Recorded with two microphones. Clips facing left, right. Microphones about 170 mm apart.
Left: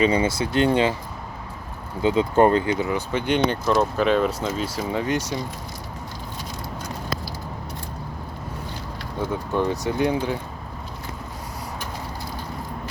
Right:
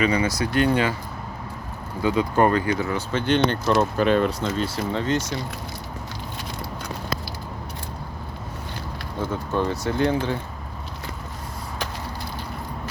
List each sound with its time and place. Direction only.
0.0 s speech: 25° left (ahead or behind)
2.0 s speech: 25° left (ahead or behind)
3.7 s speech: centre (ahead or behind)
9.3 s speech: 15° left (ahead or behind)